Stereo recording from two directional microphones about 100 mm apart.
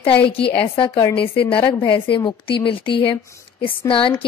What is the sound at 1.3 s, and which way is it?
A woman's voice, 60° left (ahead or behind).